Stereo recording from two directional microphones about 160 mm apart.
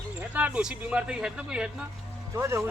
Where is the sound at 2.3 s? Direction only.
15° right (ahead or behind).